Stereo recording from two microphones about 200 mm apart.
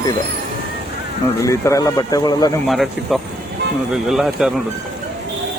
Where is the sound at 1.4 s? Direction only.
15° left (ahead or behind).